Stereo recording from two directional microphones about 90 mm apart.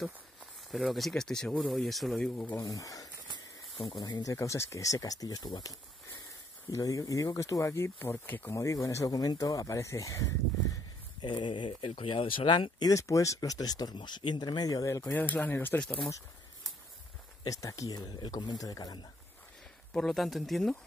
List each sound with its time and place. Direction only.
0.7 s speech: centre (ahead or behind)
2.1 s speech: 10° left (ahead or behind)
2.6 s speech: 40° left (ahead or behind); by 8.5 s 25° left (ahead or behind)
8.5 s speech: 40° left (ahead or behind)
11.1 s speech: 60° left (ahead or behind)
12.9 s speech: 35° left (ahead or behind)
13.9 s speech: 60° left (ahead or behind); by 15.1 s 35° left (ahead or behind)
15.1 s speech: 20° left (ahead or behind)
15.8 s speech: 10° left (ahead or behind)
17.4 s speech: 40° left (ahead or behind)
19.9 s speech: 5° left (ahead or behind)